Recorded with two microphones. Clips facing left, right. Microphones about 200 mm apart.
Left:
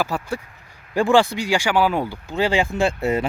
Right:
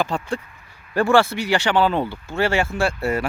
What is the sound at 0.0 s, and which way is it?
Speech, 5° left (ahead or behind).